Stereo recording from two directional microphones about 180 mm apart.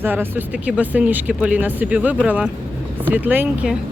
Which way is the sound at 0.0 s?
10° right (ahead or behind).